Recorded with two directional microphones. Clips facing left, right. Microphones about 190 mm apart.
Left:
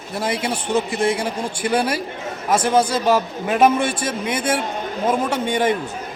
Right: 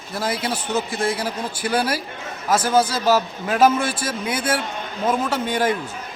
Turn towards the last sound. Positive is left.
turn(degrees=-5)  # may be behind; listen again after turning